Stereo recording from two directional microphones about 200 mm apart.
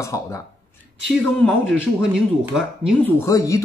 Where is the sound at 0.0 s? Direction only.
15° left (ahead or behind).